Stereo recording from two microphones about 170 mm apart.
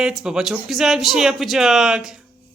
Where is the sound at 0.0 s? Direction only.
5° right (ahead or behind).